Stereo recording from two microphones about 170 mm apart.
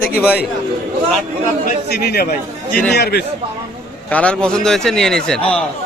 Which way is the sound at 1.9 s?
70° left (ahead or behind).